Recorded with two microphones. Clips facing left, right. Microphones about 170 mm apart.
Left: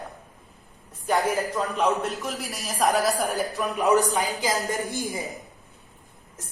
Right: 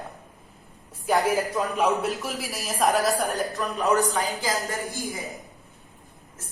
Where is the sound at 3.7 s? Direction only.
15° left (ahead or behind).